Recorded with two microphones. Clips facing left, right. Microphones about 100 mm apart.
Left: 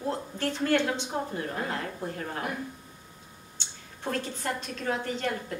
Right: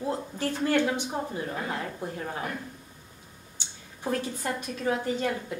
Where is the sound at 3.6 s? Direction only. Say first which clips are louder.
Even; 10° right (ahead or behind).